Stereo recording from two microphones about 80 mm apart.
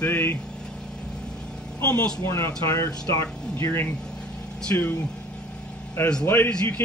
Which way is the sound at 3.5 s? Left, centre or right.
Left.